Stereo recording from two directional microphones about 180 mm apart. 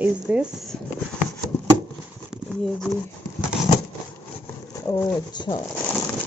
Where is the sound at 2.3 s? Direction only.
Centre (ahead or behind).